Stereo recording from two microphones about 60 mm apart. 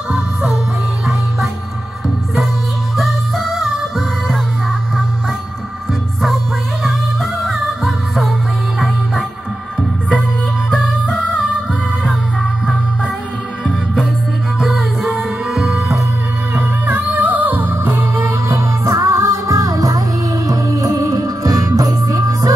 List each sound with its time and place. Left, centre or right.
3.0 s music: centre
7.4 s music: centre
14.6 s music: centre
16.5 s music: right